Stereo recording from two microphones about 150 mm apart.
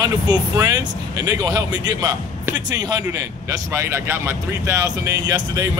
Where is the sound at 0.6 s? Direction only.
25° right (ahead or behind).